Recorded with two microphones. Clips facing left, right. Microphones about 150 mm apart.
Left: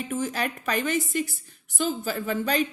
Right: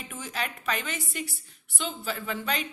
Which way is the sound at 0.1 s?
40° left (ahead or behind).